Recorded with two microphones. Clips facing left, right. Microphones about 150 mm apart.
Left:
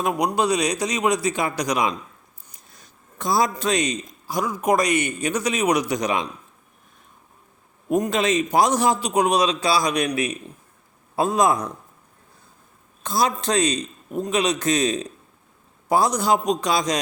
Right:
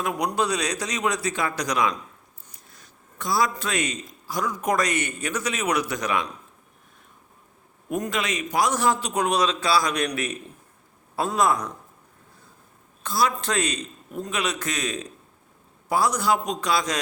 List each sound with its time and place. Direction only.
0.2 s a man's voice: 15° left (ahead or behind)
8.1 s a man's voice: 25° left (ahead or behind)
13.0 s a man's voice: 20° left (ahead or behind)